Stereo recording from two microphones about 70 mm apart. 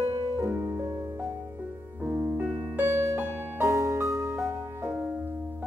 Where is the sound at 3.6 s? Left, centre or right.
Right.